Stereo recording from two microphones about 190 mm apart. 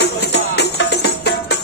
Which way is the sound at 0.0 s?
60° left (ahead or behind).